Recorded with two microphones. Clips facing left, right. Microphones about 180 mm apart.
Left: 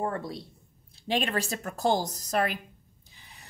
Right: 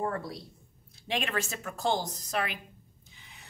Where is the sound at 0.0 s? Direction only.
25° left (ahead or behind).